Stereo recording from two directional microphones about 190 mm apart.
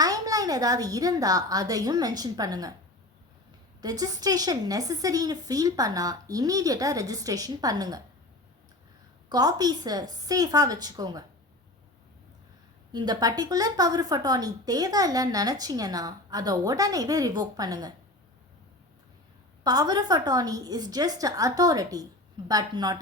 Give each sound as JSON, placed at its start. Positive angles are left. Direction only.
{"t": 0.0, "sound": "a woman's voice", "side_deg": -20}
{"t": 3.8, "sound": "speech", "side_deg": -20}
{"t": 9.3, "sound": "speech", "side_deg": -20}
{"t": 12.9, "sound": "speech", "side_deg": -20}
{"t": 19.6, "sound": "speech", "side_deg": -20}